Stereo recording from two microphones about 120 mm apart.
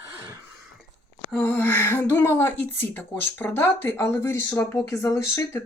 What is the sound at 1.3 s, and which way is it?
A woman's voice, 10° left (ahead or behind).